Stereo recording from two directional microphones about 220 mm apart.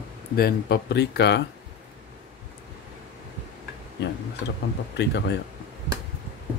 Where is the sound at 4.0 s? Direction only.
50° left (ahead or behind).